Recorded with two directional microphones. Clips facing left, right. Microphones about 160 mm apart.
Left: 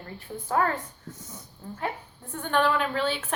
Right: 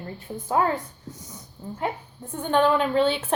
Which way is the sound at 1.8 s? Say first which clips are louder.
Right 3 dB; 20° right (ahead or behind).